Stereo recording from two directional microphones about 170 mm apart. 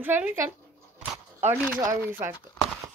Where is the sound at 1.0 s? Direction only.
10° right (ahead or behind).